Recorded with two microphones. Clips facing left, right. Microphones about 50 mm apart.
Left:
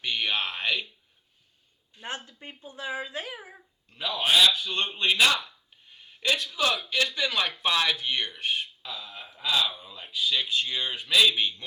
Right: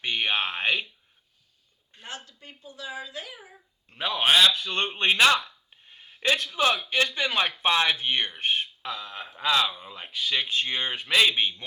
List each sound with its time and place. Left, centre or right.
0.0 s speech: right
2.0 s speech: left
3.8 s a man's voice: right
8.9 s a man's voice: right
9.7 s a man's voice: right